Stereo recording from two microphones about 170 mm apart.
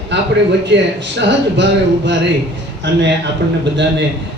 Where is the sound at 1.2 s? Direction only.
90° right.